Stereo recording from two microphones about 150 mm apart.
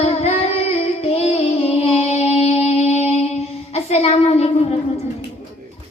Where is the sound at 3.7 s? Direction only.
45° left (ahead or behind).